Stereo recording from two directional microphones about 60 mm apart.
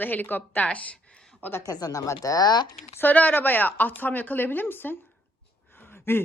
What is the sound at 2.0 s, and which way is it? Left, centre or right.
Speech, left.